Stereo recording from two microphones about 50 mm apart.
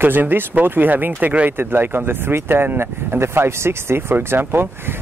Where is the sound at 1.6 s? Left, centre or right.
Right.